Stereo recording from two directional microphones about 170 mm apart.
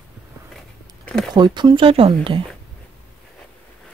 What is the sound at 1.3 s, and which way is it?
Speech, 25° right (ahead or behind).